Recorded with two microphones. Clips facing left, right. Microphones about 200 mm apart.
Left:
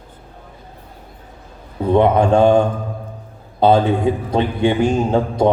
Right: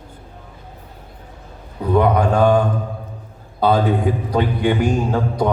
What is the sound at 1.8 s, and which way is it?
A man's voice, 25° left (ahead or behind).